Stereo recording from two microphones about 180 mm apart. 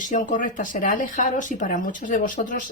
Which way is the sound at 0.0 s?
45° left (ahead or behind).